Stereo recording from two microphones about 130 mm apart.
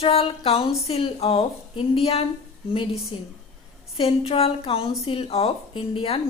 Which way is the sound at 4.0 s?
45° left (ahead or behind).